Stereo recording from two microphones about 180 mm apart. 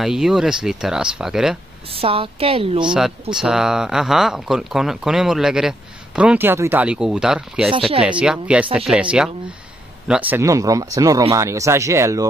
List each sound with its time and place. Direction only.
0.0 s speech: centre (ahead or behind)
2.0 s a woman's voice: 30° right (ahead or behind)
2.9 s speech: 5° right (ahead or behind)